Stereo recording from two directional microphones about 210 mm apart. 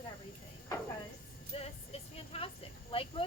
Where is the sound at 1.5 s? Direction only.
30° left (ahead or behind).